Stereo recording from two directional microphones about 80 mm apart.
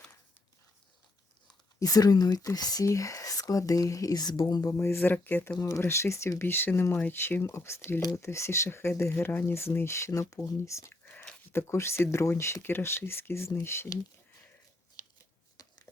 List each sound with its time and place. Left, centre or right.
1.8 s speech: left
4.6 s speech: left
5.5 s speech: left
15.6 s a sound: left